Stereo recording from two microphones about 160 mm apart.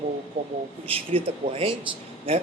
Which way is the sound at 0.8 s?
35° right (ahead or behind).